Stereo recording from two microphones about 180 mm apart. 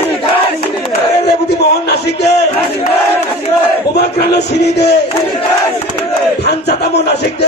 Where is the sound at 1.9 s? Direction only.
65° left (ahead or behind).